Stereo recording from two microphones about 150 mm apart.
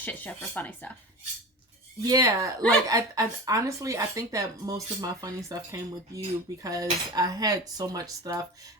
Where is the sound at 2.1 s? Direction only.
25° right (ahead or behind).